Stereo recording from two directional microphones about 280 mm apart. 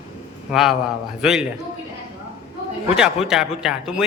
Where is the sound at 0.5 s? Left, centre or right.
Centre.